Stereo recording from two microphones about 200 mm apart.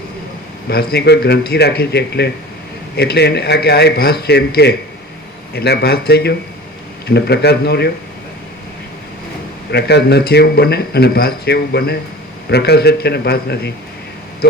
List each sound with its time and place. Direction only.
0.7 s speech: 50° left (ahead or behind)
9.7 s speech: 55° left (ahead or behind)